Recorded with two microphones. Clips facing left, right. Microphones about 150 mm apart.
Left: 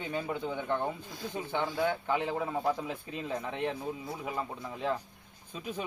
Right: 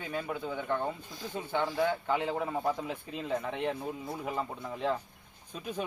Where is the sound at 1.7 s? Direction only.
Centre (ahead or behind).